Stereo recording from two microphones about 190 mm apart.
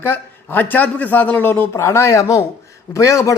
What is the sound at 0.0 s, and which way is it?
A woman's voice, 10° left (ahead or behind).